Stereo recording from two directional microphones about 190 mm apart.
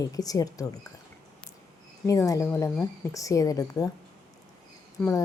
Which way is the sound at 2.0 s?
15° left (ahead or behind).